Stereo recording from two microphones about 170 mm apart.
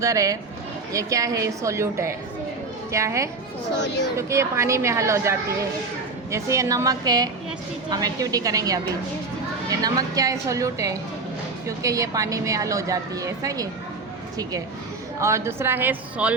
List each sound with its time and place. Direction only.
0.0 s a woman's voice: 20° right (ahead or behind)
3.8 s speech: 90° left
4.2 s a woman's voice: 15° right (ahead or behind)
15.2 s a woman's voice: 15° right (ahead or behind)